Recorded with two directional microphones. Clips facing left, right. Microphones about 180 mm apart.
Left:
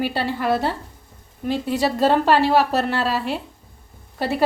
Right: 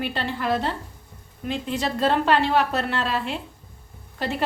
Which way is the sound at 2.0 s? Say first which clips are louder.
Left 3 dB; 40° left (ahead or behind).